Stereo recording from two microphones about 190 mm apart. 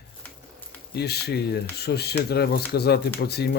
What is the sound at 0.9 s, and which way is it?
Speech, 60° left (ahead or behind).